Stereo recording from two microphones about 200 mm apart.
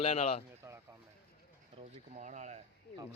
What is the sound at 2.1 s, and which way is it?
Speech, 40° right (ahead or behind).